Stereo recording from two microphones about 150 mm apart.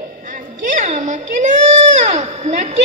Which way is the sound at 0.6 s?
60° right (ahead or behind).